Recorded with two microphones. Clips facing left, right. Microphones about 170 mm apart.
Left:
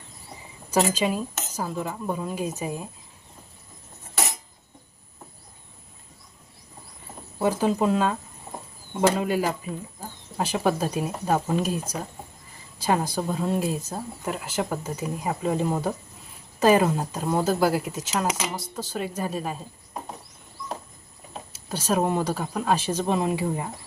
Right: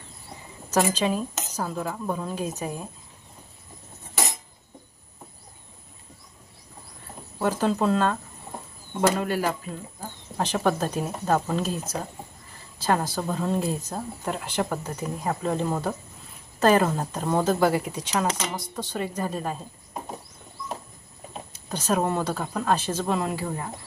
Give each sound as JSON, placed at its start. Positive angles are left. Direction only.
{"t": 0.9, "sound": "speech", "side_deg": 10}
{"t": 7.3, "sound": "speech", "side_deg": 15}
{"t": 10.0, "sound": "a sound", "side_deg": 10}
{"t": 10.9, "sound": "speech", "side_deg": 10}
{"t": 21.7, "sound": "speech", "side_deg": 10}